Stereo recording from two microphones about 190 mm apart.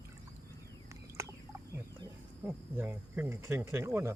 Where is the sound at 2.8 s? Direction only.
10° right (ahead or behind).